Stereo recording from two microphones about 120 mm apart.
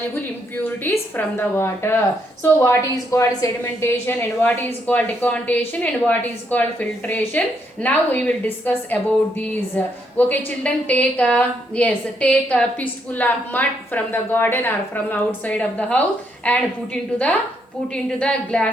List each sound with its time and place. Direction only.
0.1 s a woman's voice: 15° left (ahead or behind)